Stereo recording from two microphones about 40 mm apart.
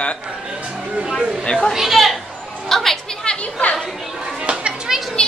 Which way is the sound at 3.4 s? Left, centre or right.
Left.